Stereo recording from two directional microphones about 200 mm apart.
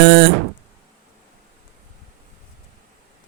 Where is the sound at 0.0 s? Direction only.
60° right (ahead or behind).